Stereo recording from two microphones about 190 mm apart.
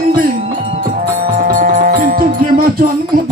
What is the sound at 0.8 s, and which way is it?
Music, 45° right (ahead or behind).